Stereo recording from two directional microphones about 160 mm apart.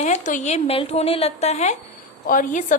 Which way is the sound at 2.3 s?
55° left (ahead or behind).